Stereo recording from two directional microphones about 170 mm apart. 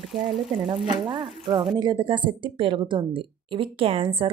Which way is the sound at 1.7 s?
25° right (ahead or behind).